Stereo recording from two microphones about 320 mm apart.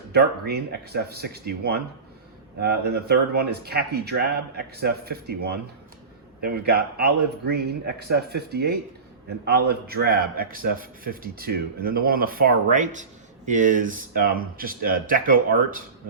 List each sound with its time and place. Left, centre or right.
0.1 s a man's voice: right